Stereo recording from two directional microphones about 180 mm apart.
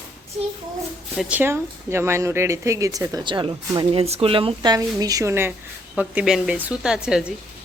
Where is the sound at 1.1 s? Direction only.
10° right (ahead or behind).